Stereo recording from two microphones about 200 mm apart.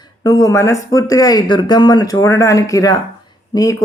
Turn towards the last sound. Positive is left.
turn(degrees=15)  # may be behind; listen again after turning